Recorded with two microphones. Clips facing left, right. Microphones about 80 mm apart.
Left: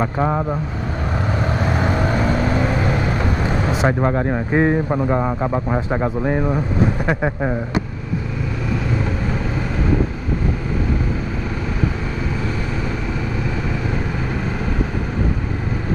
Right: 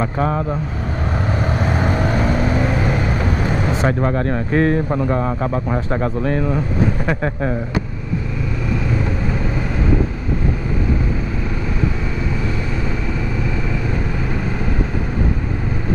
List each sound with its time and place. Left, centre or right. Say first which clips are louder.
0.0 s a man's voice: even; centre
1.4 s vehicle: even; centre
2.8 s vehicle: even; centre
3.4 s a man's voice: even; centre